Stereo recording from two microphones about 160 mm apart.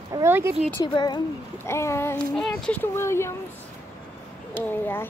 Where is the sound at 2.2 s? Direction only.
5° left (ahead or behind).